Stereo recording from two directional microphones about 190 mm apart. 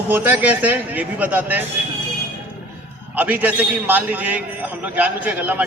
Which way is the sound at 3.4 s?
10° right (ahead or behind).